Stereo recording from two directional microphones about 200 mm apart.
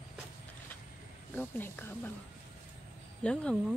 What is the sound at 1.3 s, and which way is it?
Speech, 10° left (ahead or behind).